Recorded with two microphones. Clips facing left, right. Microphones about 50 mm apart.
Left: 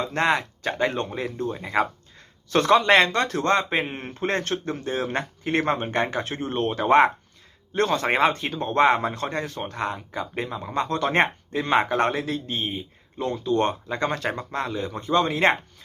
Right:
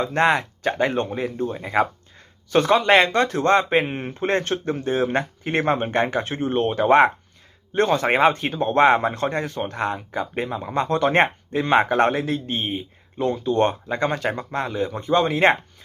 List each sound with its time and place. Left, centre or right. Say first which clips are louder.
0.0 s a man's voice: right 3 dB; right
0.6 s speech: right 3 dB; centre
3.1 s a man's voice: right 4 dB; right
4.8 s a man's voice: right 5 dB; right
13.8 s speech: right 3 dB; centre